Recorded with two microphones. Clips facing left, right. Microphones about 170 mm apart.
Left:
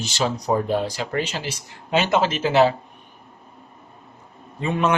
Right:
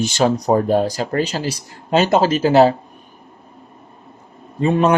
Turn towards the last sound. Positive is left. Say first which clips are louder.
# right 6 dB
turn(degrees=-35)  # may be behind; listen again after turning